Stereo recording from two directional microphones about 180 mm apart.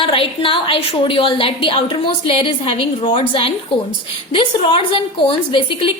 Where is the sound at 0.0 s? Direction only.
30° left (ahead or behind).